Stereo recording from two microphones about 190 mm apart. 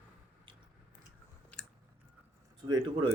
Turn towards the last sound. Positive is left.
turn(degrees=-20)  # may be behind; listen again after turning